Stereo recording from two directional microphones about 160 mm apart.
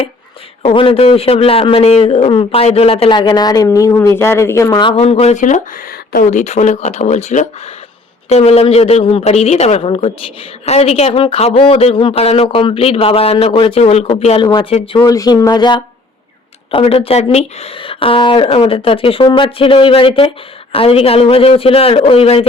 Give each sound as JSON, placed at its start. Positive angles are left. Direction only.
{"t": 0.6, "sound": "a man's voice", "side_deg": 35}
{"t": 6.3, "sound": "a man's voice", "side_deg": 45}
{"t": 15.1, "sound": "a man's voice", "side_deg": 20}